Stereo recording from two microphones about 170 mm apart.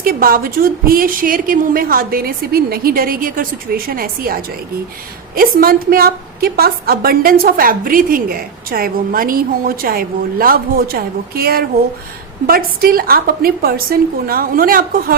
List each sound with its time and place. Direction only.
0.0 s a woman's voice: 60° right (ahead or behind)